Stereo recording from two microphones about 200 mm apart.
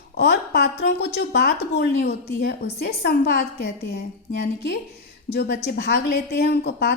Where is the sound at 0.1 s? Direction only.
55° left (ahead or behind).